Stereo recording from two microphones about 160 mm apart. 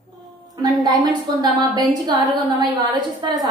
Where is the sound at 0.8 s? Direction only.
25° right (ahead or behind).